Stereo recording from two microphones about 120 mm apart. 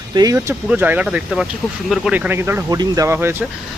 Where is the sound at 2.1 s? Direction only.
15° right (ahead or behind).